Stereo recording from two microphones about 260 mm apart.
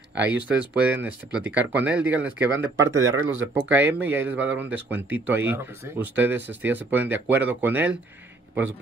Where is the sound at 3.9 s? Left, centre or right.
Centre.